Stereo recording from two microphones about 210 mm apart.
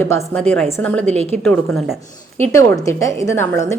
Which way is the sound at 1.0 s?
30° right (ahead or behind).